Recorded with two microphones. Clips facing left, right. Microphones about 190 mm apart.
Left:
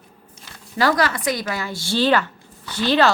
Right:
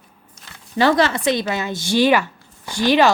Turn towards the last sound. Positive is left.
turn(degrees=-15)  # may be behind; listen again after turning